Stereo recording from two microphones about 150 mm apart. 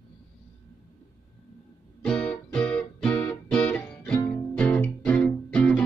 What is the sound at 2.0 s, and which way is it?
Music, 5° left (ahead or behind).